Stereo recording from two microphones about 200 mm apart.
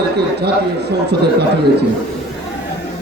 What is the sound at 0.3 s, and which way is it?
A man's voice, 55° right (ahead or behind).